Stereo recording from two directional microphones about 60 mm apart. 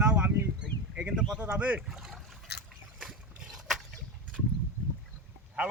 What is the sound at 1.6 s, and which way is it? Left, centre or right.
Speech, right.